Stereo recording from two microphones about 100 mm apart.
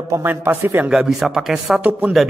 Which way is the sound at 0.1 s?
20° right (ahead or behind).